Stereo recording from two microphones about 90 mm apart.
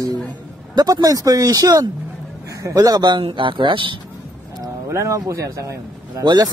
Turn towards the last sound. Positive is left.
turn(degrees=-50)  # may be behind; listen again after turning